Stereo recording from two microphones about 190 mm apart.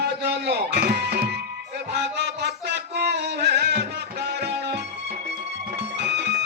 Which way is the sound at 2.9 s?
60° right (ahead or behind).